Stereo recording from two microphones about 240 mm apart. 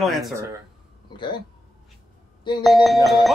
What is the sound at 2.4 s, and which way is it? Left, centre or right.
Speech, centre.